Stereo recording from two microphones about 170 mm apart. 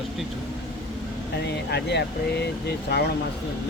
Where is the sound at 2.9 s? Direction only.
75° left (ahead or behind).